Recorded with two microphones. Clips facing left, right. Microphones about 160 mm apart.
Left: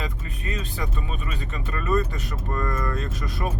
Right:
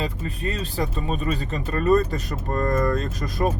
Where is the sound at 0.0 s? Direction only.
35° right (ahead or behind).